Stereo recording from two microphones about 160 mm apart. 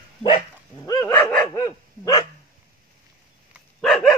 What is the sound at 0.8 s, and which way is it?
Dog, 20° left (ahead or behind).